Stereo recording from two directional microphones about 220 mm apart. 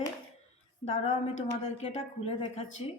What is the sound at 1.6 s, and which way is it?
A woman's voice, 30° left (ahead or behind).